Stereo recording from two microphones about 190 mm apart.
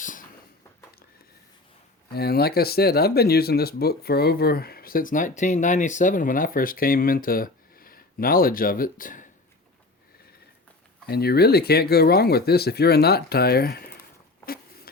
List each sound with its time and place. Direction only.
0.0 s a sound: 45° left (ahead or behind)
2.1 s speech: 55° left (ahead or behind)
11.0 s speech: 55° left (ahead or behind)